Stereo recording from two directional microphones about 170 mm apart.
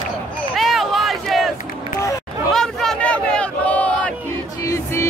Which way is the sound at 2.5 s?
Centre (ahead or behind).